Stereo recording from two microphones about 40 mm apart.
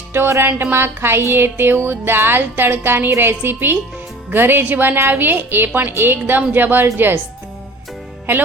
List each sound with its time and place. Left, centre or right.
0.1 s music: right
4.3 s a woman's voice: right
8.3 s a woman's voice: right